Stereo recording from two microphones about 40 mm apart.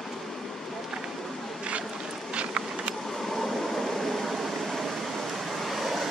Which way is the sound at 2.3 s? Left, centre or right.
Right.